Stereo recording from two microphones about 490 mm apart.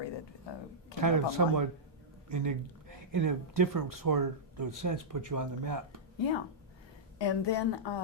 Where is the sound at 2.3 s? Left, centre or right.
Right.